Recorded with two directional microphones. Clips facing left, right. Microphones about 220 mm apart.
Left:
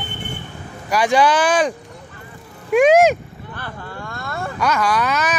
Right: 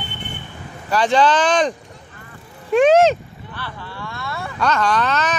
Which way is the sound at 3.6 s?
45° left (ahead or behind).